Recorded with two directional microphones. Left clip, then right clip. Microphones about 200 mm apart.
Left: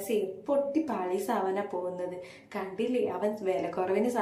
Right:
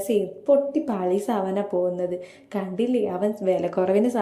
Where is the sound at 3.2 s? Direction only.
30° right (ahead or behind).